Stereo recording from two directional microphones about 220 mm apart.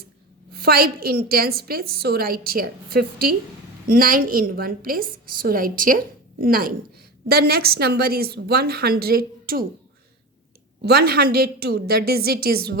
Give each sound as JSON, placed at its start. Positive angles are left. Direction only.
{"t": 0.5, "sound": "a woman's voice", "side_deg": -45}
{"t": 10.8, "sound": "a woman's voice", "side_deg": -45}